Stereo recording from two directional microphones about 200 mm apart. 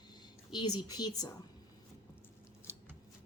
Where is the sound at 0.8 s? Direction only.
20° left (ahead or behind).